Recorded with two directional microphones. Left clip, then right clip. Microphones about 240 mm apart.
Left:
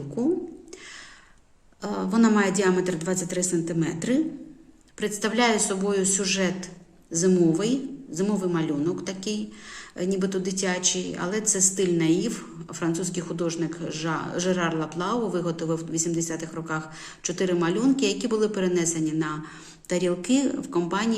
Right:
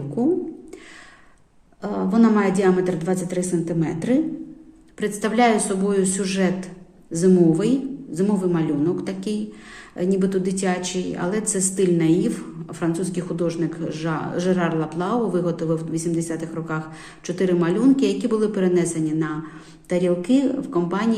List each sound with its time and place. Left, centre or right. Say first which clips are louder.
1.8 s a woman's voice: right 4 dB; centre